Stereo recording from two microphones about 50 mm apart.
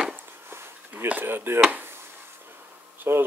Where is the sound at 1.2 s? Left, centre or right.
Right.